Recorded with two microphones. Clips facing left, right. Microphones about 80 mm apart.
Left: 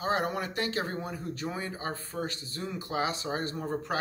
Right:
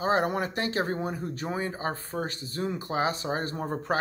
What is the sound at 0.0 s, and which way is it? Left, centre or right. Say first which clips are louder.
Speech: right 4 dB; right.